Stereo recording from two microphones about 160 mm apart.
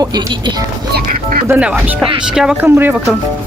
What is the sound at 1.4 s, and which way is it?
Speech, 10° right (ahead or behind).